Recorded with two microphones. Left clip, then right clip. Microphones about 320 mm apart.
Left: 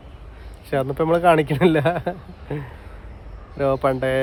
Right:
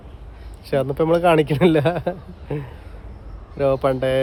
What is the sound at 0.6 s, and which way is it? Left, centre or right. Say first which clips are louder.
Speech: right 2 dB; centre.